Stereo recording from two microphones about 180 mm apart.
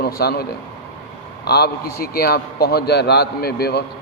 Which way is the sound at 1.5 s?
60° left (ahead or behind).